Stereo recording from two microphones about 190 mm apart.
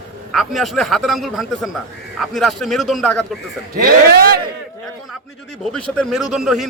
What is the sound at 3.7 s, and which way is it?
Speech, 55° right (ahead or behind).